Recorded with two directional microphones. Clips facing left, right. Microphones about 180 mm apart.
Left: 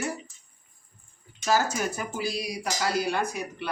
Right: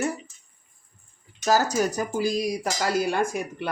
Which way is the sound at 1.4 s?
40° right (ahead or behind).